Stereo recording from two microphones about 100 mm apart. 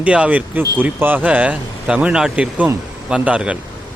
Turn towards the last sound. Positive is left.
turn(degrees=-10)  # may be behind; listen again after turning